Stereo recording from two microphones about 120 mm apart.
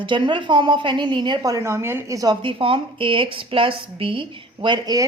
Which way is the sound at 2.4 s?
45° right (ahead or behind).